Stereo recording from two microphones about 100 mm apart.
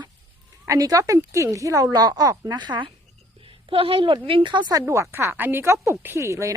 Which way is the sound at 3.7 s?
65° right (ahead or behind).